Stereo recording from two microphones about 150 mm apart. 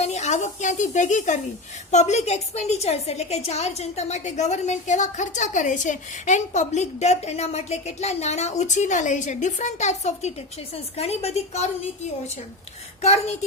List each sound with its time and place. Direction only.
0.0 s a woman's voice: 50° left (ahead or behind)